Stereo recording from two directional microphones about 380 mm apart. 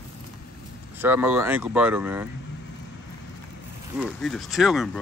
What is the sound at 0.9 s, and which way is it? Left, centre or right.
Speech, centre.